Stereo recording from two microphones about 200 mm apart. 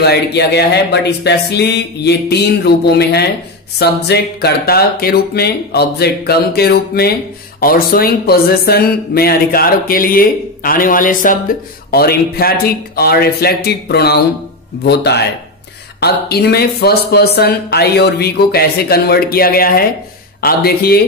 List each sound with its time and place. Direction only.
0.0 s speech: 55° left (ahead or behind)